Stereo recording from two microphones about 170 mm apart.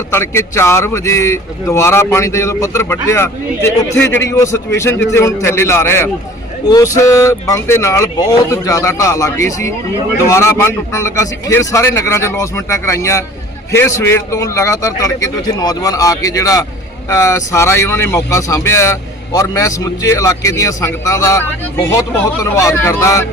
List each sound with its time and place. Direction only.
0.1 s speech: 15° left (ahead or behind)